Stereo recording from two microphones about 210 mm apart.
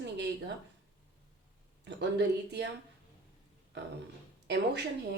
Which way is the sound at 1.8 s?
55° right (ahead or behind).